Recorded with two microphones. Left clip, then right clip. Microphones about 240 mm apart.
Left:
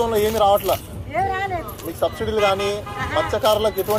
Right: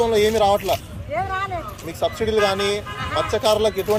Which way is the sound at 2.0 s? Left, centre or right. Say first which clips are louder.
Even; right.